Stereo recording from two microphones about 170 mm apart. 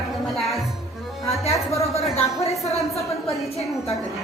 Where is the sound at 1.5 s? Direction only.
20° left (ahead or behind).